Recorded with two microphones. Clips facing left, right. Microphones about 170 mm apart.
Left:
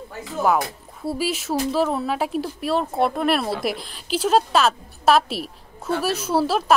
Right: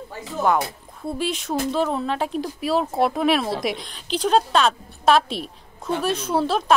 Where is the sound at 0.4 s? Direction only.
5° left (ahead or behind).